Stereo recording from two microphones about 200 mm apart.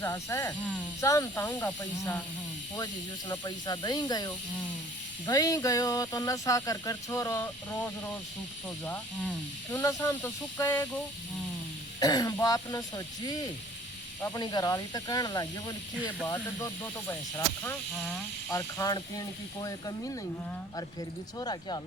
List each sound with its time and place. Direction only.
0.0 s speech: 15° left (ahead or behind)
9.7 s speech: 15° left (ahead or behind)
11.9 s speech: 20° left (ahead or behind)
14.2 s speech: 15° left (ahead or behind)
21.3 s speech: 20° left (ahead or behind)